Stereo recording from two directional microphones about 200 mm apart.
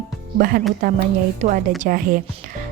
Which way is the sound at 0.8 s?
45° right (ahead or behind).